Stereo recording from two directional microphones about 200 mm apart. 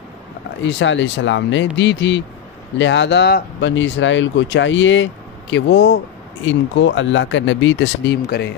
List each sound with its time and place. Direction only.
0.7 s speech: 65° left (ahead or behind)